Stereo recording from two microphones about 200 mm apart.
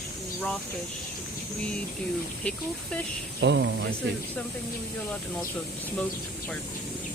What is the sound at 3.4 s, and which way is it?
Speech, 60° right (ahead or behind).